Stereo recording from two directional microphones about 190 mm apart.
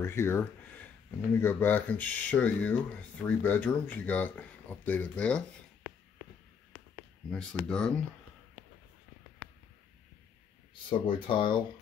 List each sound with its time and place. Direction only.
0.0 s speech: 15° left (ahead or behind)
7.2 s speech: 5° left (ahead or behind)
10.7 s speech: 25° left (ahead or behind)